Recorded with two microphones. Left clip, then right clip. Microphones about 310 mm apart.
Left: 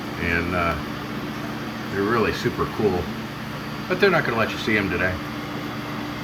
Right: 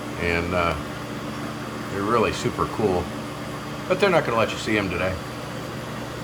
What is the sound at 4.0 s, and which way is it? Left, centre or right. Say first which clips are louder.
Speech: left 1 dB; centre.